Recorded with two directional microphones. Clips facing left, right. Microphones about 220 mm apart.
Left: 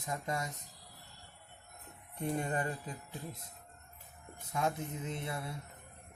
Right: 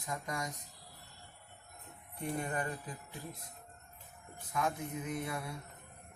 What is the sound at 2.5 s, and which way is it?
Speech, 20° left (ahead or behind).